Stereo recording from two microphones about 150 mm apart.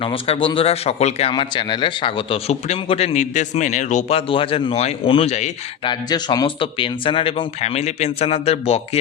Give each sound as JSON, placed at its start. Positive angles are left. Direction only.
{"t": 0.0, "sound": "speech", "side_deg": 35}
{"t": 1.3, "sound": "speech", "side_deg": 30}
{"t": 4.3, "sound": "speech", "side_deg": 35}
{"t": 5.8, "sound": "speech", "side_deg": 30}